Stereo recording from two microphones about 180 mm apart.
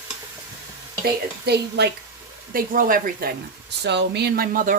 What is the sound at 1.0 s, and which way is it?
Speech, 65° right (ahead or behind).